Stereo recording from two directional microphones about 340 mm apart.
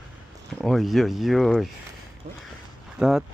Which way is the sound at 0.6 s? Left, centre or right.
Centre.